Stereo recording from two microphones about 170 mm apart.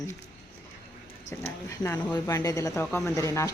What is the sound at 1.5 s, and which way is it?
Speech, 15° left (ahead or behind).